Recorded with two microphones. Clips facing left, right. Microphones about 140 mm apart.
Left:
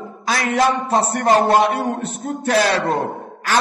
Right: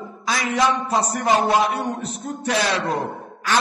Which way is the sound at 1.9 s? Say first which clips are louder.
Left 4 dB; 55° left (ahead or behind).